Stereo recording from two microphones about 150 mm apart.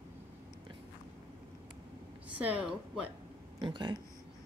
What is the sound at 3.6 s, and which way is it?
Speech, 30° right (ahead or behind).